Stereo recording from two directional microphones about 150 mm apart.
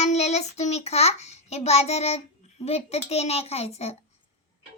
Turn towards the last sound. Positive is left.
turn(degrees=45)  # may be behind; listen again after turning